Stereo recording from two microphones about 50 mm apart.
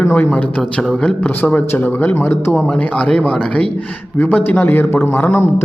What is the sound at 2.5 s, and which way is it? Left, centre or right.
Speech, centre.